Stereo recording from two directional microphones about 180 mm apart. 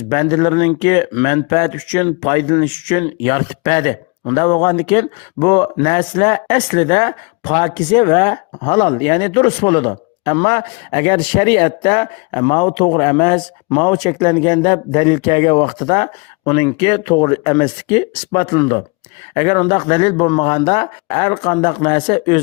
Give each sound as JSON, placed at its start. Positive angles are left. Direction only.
{"t": 0.1, "sound": "speech", "side_deg": 30}